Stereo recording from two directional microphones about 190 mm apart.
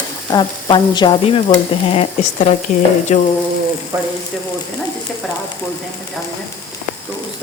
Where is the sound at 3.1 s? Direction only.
35° left (ahead or behind).